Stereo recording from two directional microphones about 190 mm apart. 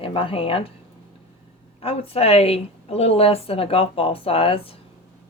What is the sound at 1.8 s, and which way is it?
A woman's voice, 30° left (ahead or behind).